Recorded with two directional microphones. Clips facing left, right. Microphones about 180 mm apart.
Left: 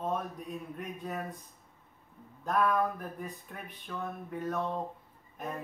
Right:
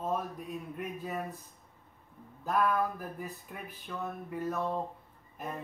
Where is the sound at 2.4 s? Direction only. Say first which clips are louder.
Left 1 dB; centre (ahead or behind).